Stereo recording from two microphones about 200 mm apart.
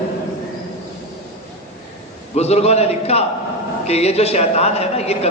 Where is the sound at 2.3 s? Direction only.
30° left (ahead or behind).